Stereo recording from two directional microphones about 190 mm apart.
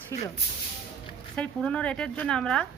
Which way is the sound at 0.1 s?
15° left (ahead or behind).